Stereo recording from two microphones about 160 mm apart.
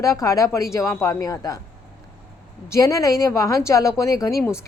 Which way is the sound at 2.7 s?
20° left (ahead or behind).